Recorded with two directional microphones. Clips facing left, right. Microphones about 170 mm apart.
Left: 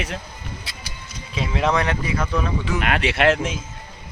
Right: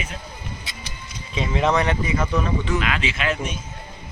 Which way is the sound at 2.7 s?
60° left (ahead or behind).